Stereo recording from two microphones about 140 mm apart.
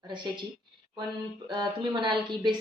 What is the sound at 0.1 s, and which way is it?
Speech, 35° right (ahead or behind).